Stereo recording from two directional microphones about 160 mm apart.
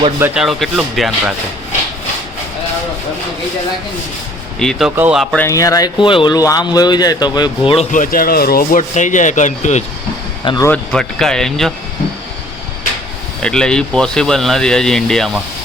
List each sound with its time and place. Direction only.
0.3 s speech: 5° right (ahead or behind)
4.6 s speech: 5° left (ahead or behind)
5.4 s speech: 20° left (ahead or behind)
7.9 s rub: 60° left (ahead or behind)
8.8 s speech: 50° left (ahead or behind)
10.4 s speech: 30° left (ahead or behind)
10.7 s speech: 5° left (ahead or behind)
13.4 s speech: 5° left (ahead or behind)